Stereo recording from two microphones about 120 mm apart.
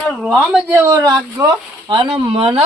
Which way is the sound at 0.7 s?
25° right (ahead or behind).